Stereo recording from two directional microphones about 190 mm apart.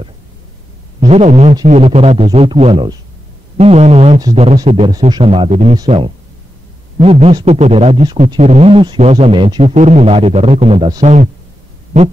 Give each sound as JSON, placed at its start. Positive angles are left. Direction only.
{"t": 1.0, "sound": "speech", "side_deg": -35}
{"t": 11.9, "sound": "heart sounds", "side_deg": -35}